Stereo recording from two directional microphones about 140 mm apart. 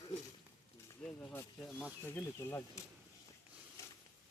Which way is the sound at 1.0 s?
10° left (ahead or behind).